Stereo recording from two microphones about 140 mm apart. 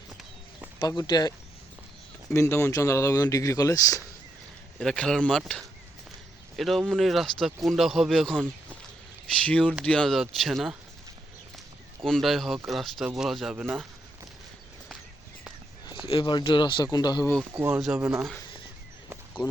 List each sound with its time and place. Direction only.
0.8 s speech: 30° left (ahead or behind)
2.3 s speech: 20° left (ahead or behind)
4.8 s speech: 5° left (ahead or behind)
6.6 s speech: centre (ahead or behind)
12.0 s speech: centre (ahead or behind)
16.0 s speech: 35° left (ahead or behind)
17.7 s speech: 5° right (ahead or behind)